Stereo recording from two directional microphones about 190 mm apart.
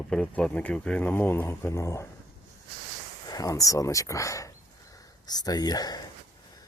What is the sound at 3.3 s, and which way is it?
Speech, 20° left (ahead or behind).